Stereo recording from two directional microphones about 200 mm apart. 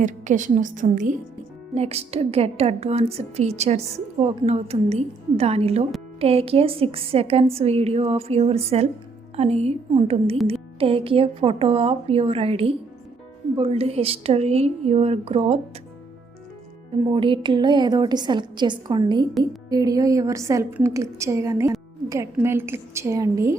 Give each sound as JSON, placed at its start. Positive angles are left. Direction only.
{"t": 0.0, "sound": "a woman's voice", "side_deg": -40}
{"t": 17.1, "sound": "a woman's voice", "side_deg": -25}